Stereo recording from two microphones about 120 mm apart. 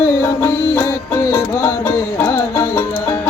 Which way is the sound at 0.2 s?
20° left (ahead or behind).